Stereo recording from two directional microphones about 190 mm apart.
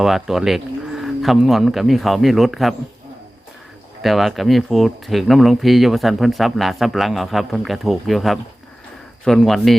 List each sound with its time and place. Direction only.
0.0 s speech: centre (ahead or behind)
4.0 s speech: centre (ahead or behind)